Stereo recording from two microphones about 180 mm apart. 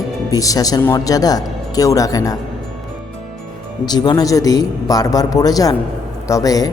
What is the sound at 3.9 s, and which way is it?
Speech, 20° left (ahead or behind).